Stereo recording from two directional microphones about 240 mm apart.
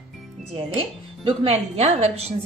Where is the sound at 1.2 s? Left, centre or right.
Right.